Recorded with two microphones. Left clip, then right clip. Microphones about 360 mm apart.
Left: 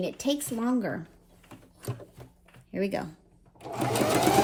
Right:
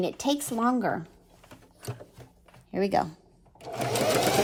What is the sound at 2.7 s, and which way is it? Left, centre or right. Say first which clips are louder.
Speech: right 5 dB; right.